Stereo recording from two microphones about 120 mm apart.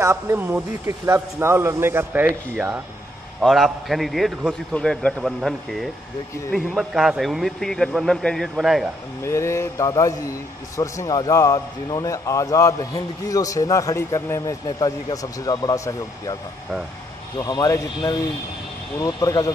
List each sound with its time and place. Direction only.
0.0 s a man's voice: 20° right (ahead or behind); by 8.9 s centre (ahead or behind)
9.2 s a man's voice: 25° left (ahead or behind)
17.4 s a man's voice: 25° left (ahead or behind)